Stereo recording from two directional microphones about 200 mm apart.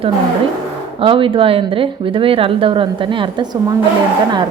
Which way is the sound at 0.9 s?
25° right (ahead or behind).